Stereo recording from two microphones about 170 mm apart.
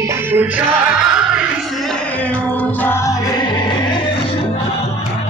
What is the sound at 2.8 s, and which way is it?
Music, 15° left (ahead or behind).